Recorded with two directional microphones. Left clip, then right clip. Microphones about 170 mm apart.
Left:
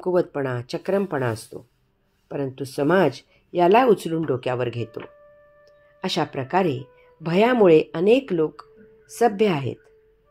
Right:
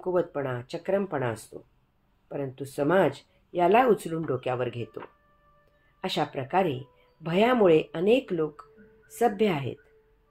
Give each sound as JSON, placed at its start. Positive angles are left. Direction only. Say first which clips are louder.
{"t": 0.0, "sound": "speech", "louder": "left 5 dB", "side_deg": 40}